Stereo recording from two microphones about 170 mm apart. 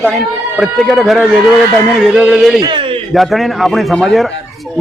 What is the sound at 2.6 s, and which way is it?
Speech, 30° right (ahead or behind).